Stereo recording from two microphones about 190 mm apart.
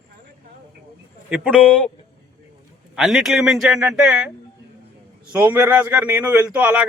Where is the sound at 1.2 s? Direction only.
5° right (ahead or behind).